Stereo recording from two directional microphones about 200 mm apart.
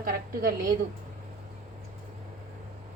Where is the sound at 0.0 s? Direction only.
45° right (ahead or behind).